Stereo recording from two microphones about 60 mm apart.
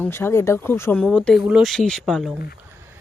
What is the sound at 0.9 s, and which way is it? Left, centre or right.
Speech, centre.